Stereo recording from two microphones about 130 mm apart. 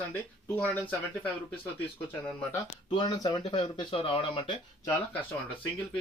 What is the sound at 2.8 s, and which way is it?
Speech, 35° left (ahead or behind).